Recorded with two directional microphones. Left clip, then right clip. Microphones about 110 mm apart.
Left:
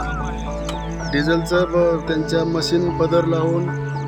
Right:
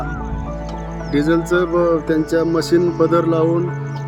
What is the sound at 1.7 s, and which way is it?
Speech, 65° right (ahead or behind).